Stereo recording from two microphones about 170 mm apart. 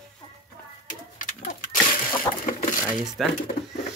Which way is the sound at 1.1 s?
50° left (ahead or behind).